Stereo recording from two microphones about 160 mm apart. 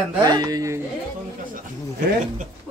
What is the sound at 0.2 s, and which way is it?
Speech, 25° right (ahead or behind).